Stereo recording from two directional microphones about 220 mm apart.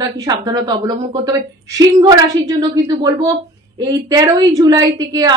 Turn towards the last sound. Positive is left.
turn(degrees=-15)  # may be behind; listen again after turning